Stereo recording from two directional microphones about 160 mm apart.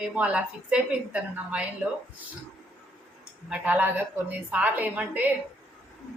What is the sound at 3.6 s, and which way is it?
A woman's voice, 10° right (ahead or behind).